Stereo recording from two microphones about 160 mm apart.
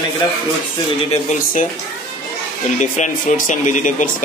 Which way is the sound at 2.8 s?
50° left (ahead or behind).